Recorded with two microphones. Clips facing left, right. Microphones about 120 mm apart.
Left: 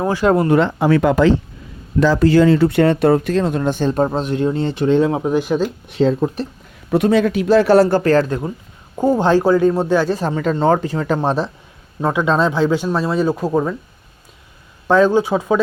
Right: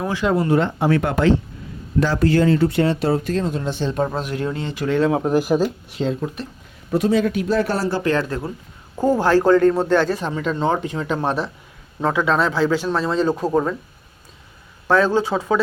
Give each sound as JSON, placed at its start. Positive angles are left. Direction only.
{"t": 0.0, "sound": "speech", "side_deg": 40}
{"t": 2.2, "sound": "speech", "side_deg": 90}
{"t": 5.0, "sound": "speech", "side_deg": 0}
{"t": 6.0, "sound": "speech", "side_deg": 35}
{"t": 6.9, "sound": "speech", "side_deg": 70}
{"t": 7.9, "sound": "speech", "side_deg": 45}
{"t": 8.3, "sound": "speech", "side_deg": 20}
{"t": 10.2, "sound": "speech", "side_deg": 40}
{"t": 11.3, "sound": "a man's voice", "side_deg": 30}
{"t": 12.0, "sound": "speech", "side_deg": 20}
{"t": 14.8, "sound": "speech", "side_deg": 15}